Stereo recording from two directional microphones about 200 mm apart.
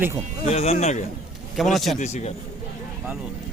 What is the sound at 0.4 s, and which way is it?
Speech, 30° left (ahead or behind).